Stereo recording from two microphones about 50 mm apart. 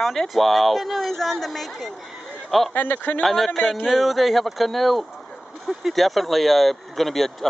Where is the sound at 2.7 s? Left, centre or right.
Left.